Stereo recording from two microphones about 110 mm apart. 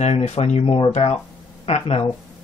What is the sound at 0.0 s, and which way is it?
A man's voice, 80° left.